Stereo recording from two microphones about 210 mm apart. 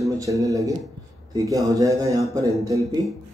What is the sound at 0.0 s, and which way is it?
A man's voice, 15° right (ahead or behind).